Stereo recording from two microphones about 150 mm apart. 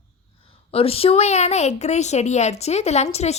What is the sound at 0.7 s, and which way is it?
A woman's voice, 40° left (ahead or behind).